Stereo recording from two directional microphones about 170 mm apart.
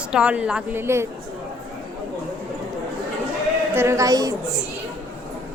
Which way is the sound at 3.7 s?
15° right (ahead or behind).